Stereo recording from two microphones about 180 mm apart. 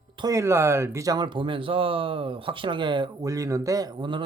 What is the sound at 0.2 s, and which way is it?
Speech, 20° right (ahead or behind).